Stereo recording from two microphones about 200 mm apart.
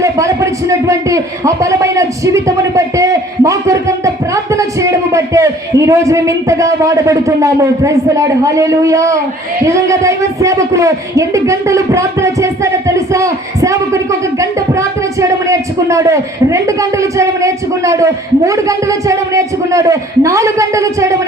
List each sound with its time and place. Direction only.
0.7 s a man's voice: 15° right (ahead or behind)